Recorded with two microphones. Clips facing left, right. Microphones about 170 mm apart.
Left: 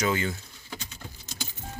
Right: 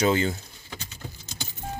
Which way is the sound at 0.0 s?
30° right (ahead or behind).